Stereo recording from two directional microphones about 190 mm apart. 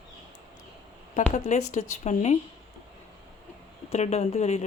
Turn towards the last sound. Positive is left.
turn(degrees=35)  # may be behind; listen again after turning